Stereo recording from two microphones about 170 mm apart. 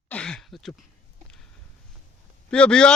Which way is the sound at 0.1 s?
5° left (ahead or behind).